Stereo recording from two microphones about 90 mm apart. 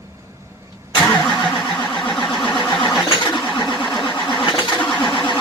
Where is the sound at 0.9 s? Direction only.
10° left (ahead or behind).